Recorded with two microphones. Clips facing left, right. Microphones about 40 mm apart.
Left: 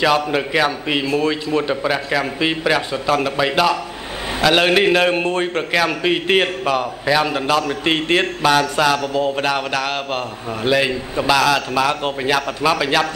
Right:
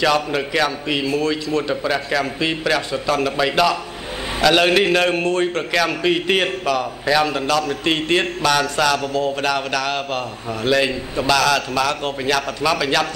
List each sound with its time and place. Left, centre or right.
0.0 s a man's voice: centre